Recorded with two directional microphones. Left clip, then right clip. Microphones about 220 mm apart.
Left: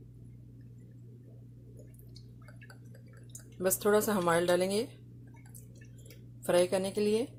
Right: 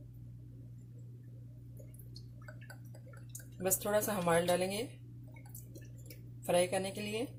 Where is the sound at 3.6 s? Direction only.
40° left (ahead or behind).